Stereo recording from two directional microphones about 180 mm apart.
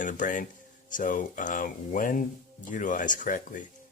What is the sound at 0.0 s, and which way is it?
Speech, 45° left (ahead or behind).